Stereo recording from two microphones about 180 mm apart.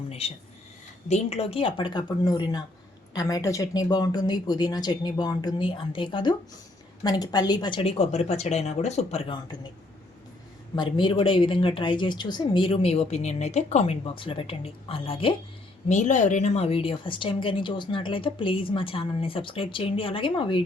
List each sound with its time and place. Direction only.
0.1 s a sound: 35° left (ahead or behind)
1.0 s a woman's voice: 40° left (ahead or behind)
10.8 s a woman's voice: 25° left (ahead or behind)
15.9 s a woman's voice: 40° left (ahead or behind)